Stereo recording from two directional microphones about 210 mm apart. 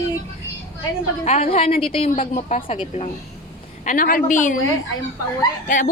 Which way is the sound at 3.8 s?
40° left (ahead or behind).